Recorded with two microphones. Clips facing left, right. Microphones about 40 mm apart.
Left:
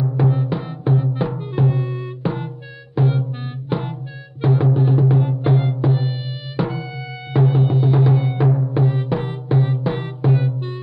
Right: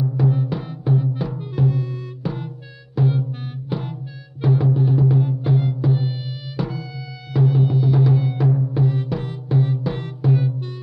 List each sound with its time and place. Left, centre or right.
0.0 s music: left